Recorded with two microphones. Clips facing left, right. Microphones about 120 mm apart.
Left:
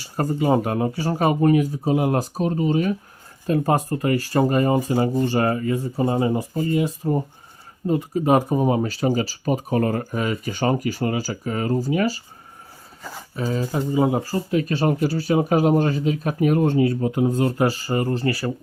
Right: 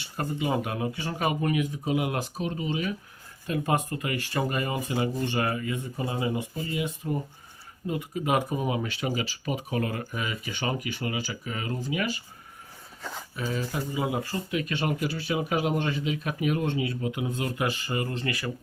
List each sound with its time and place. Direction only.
0.0 s speech: 40° left (ahead or behind)
13.0 s speech: 5° left (ahead or behind)
13.3 s speech: 35° left (ahead or behind)